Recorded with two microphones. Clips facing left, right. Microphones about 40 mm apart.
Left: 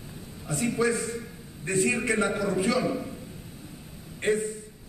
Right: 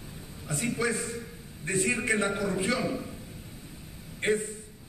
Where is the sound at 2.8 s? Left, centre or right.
Centre.